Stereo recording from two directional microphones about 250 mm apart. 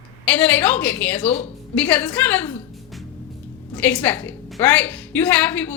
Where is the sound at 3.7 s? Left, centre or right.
Centre.